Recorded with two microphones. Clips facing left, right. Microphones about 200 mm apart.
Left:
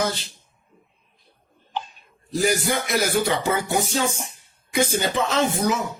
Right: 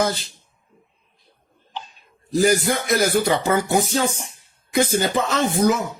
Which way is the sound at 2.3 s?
45° right (ahead or behind).